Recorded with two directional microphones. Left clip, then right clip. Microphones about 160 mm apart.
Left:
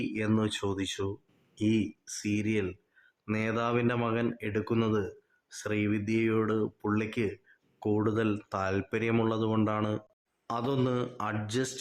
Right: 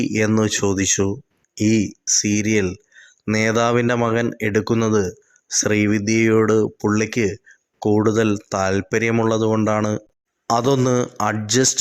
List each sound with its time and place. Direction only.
0.1 s speech: 30° right (ahead or behind)
10.4 s a man's voice: 45° right (ahead or behind)
10.8 s speech: 35° right (ahead or behind)